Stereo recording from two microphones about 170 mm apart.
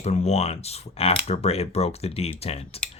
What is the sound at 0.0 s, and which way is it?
Speech, 40° left (ahead or behind).